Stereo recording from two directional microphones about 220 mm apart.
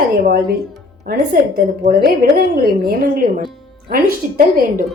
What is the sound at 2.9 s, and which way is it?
A woman's voice, 40° right (ahead or behind).